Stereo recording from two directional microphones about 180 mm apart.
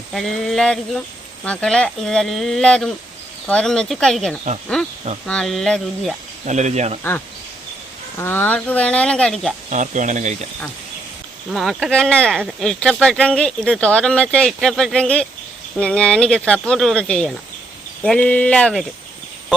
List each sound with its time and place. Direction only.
0.1 s speech: centre (ahead or behind)
6.4 s speech: 40° right (ahead or behind)
8.2 s speech: 10° left (ahead or behind)
9.6 s speech: 45° right (ahead or behind)
11.5 s speech: centre (ahead or behind)